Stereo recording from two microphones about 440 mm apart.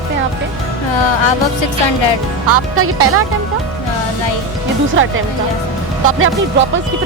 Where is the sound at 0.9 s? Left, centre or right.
Left.